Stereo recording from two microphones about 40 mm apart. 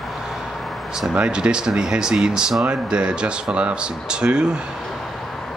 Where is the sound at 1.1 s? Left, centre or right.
Right.